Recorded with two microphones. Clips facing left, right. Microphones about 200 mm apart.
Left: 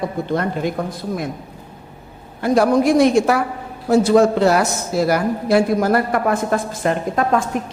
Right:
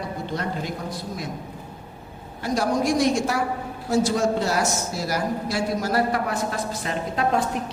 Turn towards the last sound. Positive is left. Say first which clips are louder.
# left 4 dB
turn(degrees=50)  # may be behind; listen again after turning